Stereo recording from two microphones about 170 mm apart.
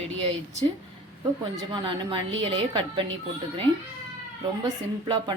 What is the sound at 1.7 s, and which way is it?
A woman's voice, 30° right (ahead or behind).